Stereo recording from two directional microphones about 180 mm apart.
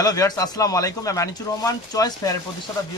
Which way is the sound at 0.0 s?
20° left (ahead or behind).